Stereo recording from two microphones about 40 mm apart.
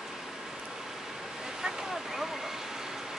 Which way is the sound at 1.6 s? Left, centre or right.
Centre.